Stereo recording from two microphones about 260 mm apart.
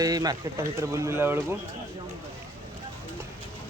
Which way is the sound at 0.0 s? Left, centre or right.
Centre.